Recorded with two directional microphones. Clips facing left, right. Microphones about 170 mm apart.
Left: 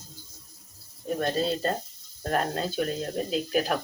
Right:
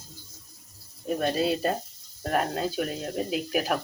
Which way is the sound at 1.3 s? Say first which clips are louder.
Right 1 dB; 10° right (ahead or behind).